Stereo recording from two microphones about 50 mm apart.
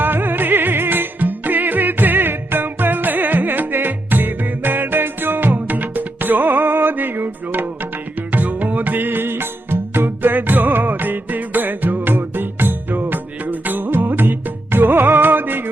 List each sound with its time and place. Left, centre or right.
0.0 s music: right